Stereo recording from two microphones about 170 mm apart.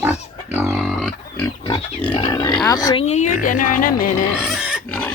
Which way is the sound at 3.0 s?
45° left (ahead or behind).